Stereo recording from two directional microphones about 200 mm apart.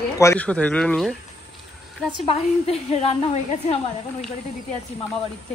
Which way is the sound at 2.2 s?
30° left (ahead or behind).